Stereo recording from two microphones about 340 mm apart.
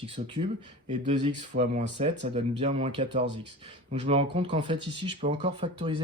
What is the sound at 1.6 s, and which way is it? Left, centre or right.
Speech, centre.